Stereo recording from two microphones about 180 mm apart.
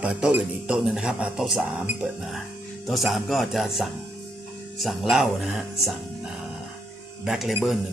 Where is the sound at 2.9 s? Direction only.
Centre (ahead or behind).